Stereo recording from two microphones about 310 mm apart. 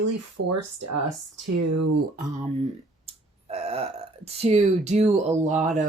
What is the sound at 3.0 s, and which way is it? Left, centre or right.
Burping, centre.